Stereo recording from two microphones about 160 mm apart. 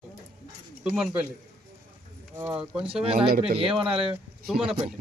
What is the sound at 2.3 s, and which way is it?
Speech, 15° right (ahead or behind).